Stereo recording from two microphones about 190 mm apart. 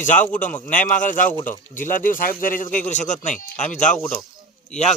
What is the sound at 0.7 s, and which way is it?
A man's voice, 40° left (ahead or behind).